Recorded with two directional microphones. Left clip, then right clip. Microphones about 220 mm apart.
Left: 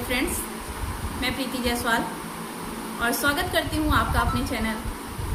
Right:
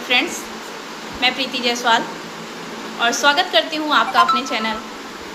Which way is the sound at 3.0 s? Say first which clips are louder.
Right 9 dB; 20° left (ahead or behind).